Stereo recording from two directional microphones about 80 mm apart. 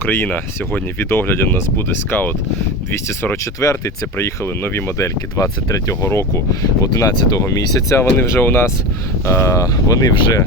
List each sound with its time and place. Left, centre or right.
0.0 s speech: left
3.6 s speech: left
6.8 s speech: left
9.7 s speech: left